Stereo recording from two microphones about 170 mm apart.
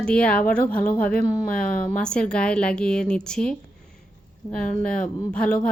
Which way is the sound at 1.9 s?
5° left (ahead or behind).